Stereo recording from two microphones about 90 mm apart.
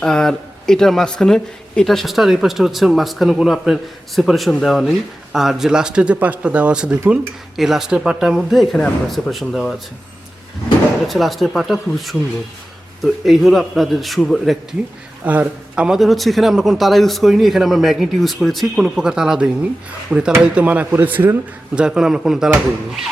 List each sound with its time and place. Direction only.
0.0 s speech: 5° left (ahead or behind)
11.1 s speech: centre (ahead or behind)
13.2 s speech: centre (ahead or behind)
15.2 s speech: 15° right (ahead or behind)
21.8 s speech: 10° right (ahead or behind)